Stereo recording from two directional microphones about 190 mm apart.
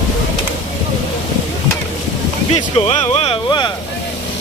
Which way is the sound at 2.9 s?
35° left (ahead or behind).